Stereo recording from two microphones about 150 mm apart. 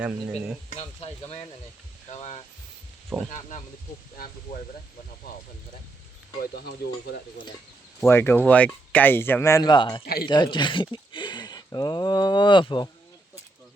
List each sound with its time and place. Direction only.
0.0 s speech: 10° right (ahead or behind)
0.7 s stir: 45° left (ahead or behind)
1.2 s speech: 35° left (ahead or behind)
2.0 s stir: 50° left (ahead or behind)
3.1 s speech: 5° left (ahead or behind)
5.3 s stir: 90° left
8.0 s speech: 15° left (ahead or behind)
9.6 s speech: 30° left (ahead or behind)